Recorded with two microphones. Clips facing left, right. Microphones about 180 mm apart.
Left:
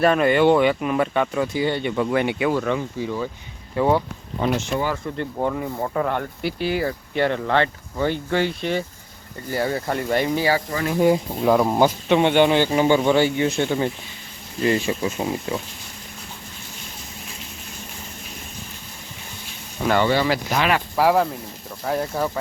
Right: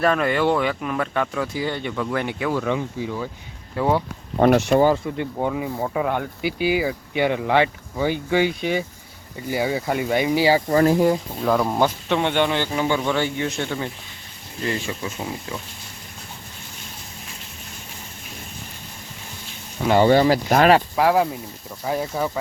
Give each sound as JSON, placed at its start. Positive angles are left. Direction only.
{"t": 0.0, "sound": "speech", "side_deg": 5}
{"t": 2.0, "sound": "speech", "side_deg": 10}
{"t": 2.6, "sound": "speech", "side_deg": -10}
{"t": 4.4, "sound": "speech", "side_deg": -60}
{"t": 5.0, "sound": "speech", "side_deg": -5}
{"t": 10.7, "sound": "speech", "side_deg": -45}
{"t": 11.0, "sound": "speech", "side_deg": 15}
{"t": 13.2, "sound": "speech", "side_deg": 15}
{"t": 15.0, "sound": "speech", "side_deg": 20}
{"t": 20.0, "sound": "speech", "side_deg": -40}
{"t": 20.9, "sound": "speech", "side_deg": 0}